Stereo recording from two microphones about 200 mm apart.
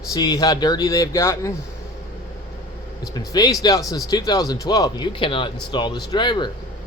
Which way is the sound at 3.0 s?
20° left (ahead or behind).